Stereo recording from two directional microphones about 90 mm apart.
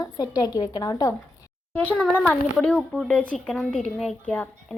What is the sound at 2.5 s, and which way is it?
Speech, 5° left (ahead or behind).